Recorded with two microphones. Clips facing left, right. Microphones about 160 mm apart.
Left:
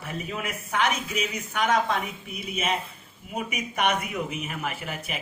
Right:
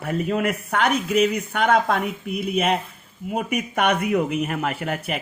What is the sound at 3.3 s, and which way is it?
Speech, 55° right (ahead or behind).